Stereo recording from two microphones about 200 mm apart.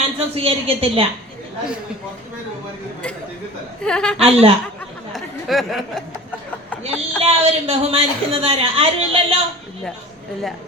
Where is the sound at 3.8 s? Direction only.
5° left (ahead or behind).